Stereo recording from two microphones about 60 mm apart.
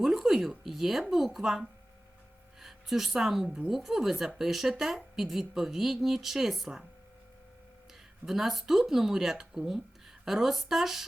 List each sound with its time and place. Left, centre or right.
0.0 s a sound: centre
0.4 s a woman's voice: centre
8.2 s a woman's voice: centre